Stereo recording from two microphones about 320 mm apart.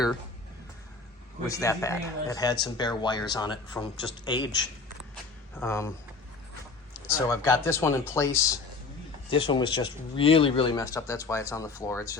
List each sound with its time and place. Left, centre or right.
1.5 s speech: centre
7.1 s speech: centre